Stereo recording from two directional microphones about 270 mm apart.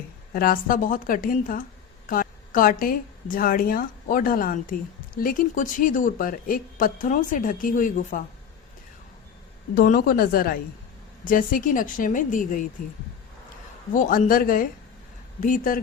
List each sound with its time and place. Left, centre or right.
0.3 s a woman's voice: left
9.7 s a woman's voice: left
13.9 s a woman's voice: left